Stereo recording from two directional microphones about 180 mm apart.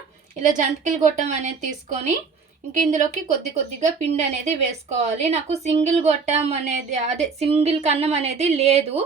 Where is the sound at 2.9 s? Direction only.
40° right (ahead or behind).